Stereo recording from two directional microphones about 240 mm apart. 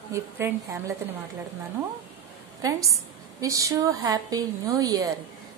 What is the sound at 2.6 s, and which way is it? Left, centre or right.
A woman's voice, centre.